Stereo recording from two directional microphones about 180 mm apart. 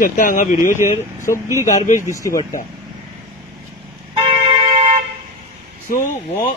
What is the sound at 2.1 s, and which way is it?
Speech, 15° left (ahead or behind).